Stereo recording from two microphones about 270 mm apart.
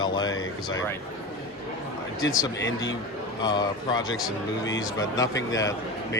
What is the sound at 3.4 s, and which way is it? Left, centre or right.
Speech, centre.